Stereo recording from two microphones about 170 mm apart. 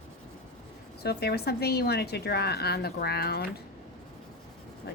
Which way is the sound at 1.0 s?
70° left (ahead or behind).